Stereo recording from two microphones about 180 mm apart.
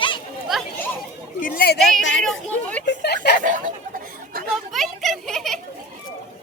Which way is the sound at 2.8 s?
65° left (ahead or behind).